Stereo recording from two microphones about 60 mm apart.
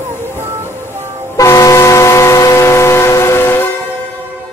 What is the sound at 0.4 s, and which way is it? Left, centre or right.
Music, right.